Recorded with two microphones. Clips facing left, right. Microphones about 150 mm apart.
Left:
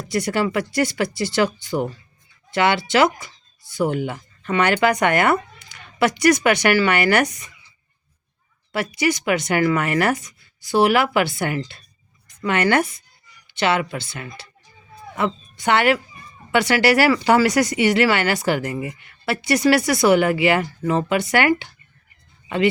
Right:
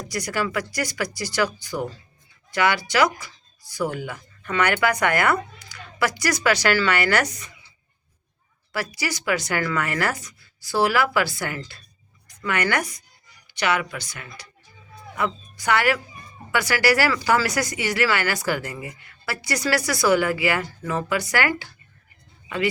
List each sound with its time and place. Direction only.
0.1 s speech: 25° left (ahead or behind)
8.7 s a woman's voice: 20° left (ahead or behind)